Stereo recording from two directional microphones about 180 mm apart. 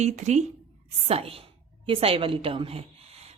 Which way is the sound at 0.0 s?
40° right (ahead or behind).